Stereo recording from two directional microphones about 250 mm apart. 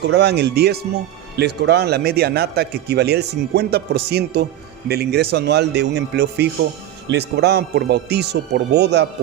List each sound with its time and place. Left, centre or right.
0.0 s a man's voice: right